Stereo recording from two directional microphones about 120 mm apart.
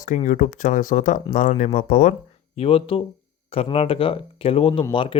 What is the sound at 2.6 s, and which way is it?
Speech, 50° left (ahead or behind).